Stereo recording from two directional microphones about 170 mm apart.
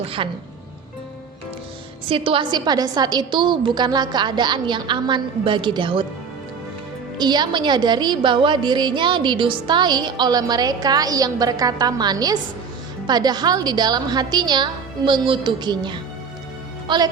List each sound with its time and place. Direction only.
0.0 s speech: 35° right (ahead or behind)
2.0 s a woman's voice: 30° right (ahead or behind)
7.2 s a woman's voice: 25° right (ahead or behind)